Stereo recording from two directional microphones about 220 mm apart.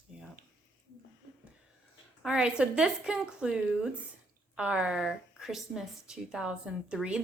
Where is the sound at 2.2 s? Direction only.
5° right (ahead or behind).